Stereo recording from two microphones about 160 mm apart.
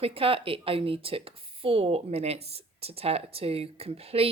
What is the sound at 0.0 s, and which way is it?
Speech, 35° right (ahead or behind).